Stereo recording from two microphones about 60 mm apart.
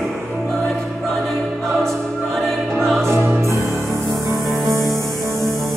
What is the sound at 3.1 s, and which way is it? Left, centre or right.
Music, right.